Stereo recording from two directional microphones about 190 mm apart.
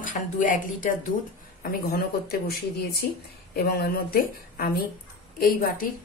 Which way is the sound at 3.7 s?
55° left (ahead or behind).